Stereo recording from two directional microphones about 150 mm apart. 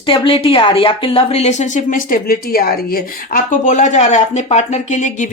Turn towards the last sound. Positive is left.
turn(degrees=55)  # may be behind; listen again after turning